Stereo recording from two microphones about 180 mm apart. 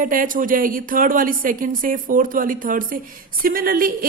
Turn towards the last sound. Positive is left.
turn(degrees=-50)  # may be behind; listen again after turning